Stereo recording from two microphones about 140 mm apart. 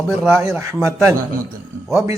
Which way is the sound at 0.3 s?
20° right (ahead or behind).